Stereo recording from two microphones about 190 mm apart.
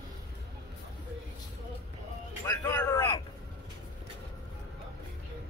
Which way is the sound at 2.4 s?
15° left (ahead or behind).